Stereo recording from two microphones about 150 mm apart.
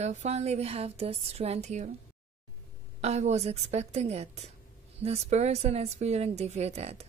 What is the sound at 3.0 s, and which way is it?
A woman's voice, 45° right (ahead or behind).